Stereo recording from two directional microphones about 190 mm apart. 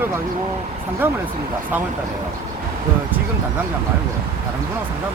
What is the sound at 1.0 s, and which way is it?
Speech, 10° right (ahead or behind).